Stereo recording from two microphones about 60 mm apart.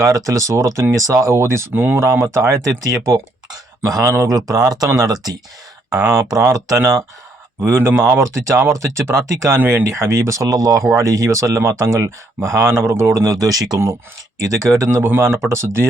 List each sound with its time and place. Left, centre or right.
0.0 s speech: right
1.7 s speech: right
2.0 s speech: right
6.0 s speech: right
7.6 s speech: right
9.6 s speech: right
10.9 s speech: right
14.8 s speech: right